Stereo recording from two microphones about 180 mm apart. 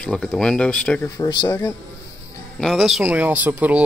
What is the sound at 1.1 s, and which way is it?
Speech, 20° left (ahead or behind).